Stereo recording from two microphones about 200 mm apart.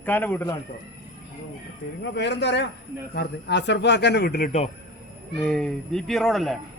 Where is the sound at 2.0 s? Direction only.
60° left (ahead or behind); by 4.6 s 40° left (ahead or behind).